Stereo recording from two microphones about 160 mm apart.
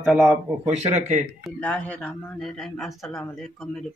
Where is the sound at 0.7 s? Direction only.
45° right (ahead or behind).